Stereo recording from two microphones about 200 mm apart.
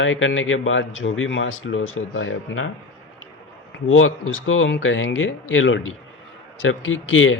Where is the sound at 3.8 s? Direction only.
90° left.